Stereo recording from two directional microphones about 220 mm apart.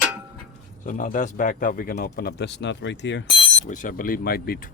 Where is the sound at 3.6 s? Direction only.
35° left (ahead or behind).